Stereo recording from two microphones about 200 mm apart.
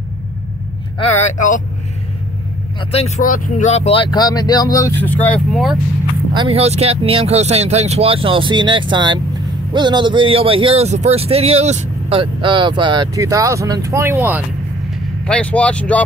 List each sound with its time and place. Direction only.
2.9 s speech: 30° left (ahead or behind)
3.3 s speech: 45° left (ahead or behind); by 5.8 s centre (ahead or behind)
6.3 s speech: 25° right (ahead or behind); by 14.4 s 10° right (ahead or behind)
15.2 s speech: 5° left (ahead or behind)